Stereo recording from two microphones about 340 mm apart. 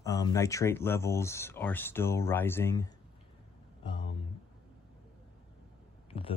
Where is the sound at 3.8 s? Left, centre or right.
Centre.